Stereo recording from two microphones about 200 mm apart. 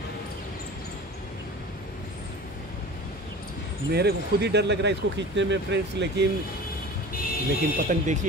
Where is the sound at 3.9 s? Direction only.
55° right (ahead or behind).